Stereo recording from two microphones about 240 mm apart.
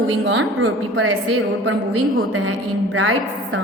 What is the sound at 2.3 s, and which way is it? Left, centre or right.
A woman's voice, right.